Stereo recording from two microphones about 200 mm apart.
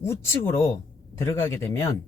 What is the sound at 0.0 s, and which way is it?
Speech, 15° left (ahead or behind).